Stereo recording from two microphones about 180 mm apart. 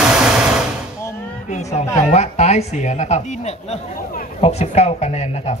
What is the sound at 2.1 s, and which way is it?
Speech, 40° left (ahead or behind).